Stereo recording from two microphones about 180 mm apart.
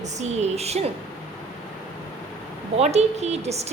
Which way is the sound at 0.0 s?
40° right (ahead or behind).